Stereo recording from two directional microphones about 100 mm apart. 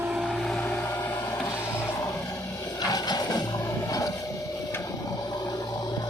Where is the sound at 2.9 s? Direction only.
40° left (ahead or behind).